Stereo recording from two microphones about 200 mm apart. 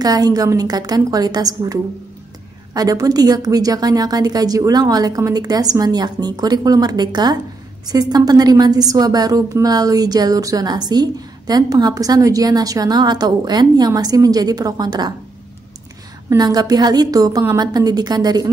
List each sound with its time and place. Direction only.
0.0 s a woman's voice: 20° right (ahead or behind)
16.3 s a woman's voice: 20° right (ahead or behind)